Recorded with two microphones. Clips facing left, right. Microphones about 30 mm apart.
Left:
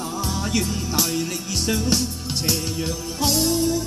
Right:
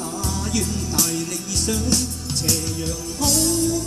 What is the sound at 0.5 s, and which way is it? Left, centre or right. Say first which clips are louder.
Music: even; centre.